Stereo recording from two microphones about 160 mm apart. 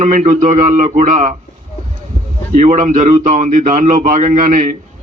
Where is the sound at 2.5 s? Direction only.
50° right (ahead or behind).